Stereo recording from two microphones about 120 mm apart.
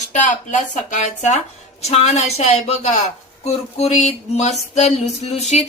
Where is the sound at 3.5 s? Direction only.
65° left (ahead or behind).